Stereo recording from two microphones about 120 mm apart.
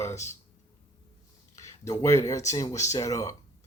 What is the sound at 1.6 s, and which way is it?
Speech, 25° left (ahead or behind).